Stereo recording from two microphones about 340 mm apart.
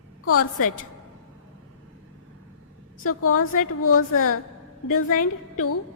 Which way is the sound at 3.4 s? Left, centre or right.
Left.